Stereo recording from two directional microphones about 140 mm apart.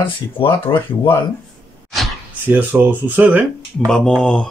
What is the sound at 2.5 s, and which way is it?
Speech, 10° right (ahead or behind).